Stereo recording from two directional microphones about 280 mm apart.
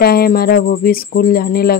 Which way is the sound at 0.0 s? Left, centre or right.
Left.